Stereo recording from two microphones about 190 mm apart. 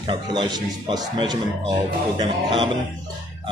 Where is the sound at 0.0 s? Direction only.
25° right (ahead or behind).